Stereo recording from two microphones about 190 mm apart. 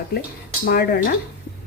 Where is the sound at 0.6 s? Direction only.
50° left (ahead or behind).